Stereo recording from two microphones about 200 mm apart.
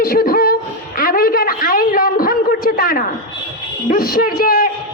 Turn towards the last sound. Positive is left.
turn(degrees=45)  # may be behind; listen again after turning